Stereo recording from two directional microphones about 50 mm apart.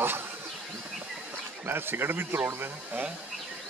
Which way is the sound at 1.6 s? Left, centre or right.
Right.